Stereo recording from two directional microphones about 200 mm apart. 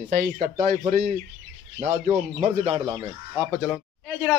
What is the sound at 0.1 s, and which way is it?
A man's voice, 50° right (ahead or behind).